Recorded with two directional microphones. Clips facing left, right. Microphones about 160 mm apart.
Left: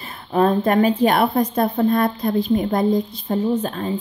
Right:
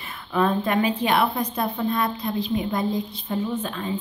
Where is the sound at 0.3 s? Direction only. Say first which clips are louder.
Left 5 dB; 40° left (ahead or behind).